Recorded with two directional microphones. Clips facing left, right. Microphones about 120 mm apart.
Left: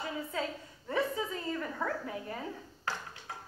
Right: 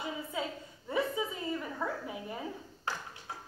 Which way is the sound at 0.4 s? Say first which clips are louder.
Left 1 dB; 15° right (ahead or behind).